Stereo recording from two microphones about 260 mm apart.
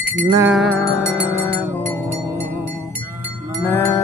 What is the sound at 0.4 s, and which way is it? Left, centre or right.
Music, centre.